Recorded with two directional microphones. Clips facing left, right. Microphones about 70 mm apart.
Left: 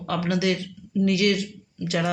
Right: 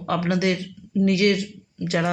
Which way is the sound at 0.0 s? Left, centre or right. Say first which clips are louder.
Right 2 dB; right.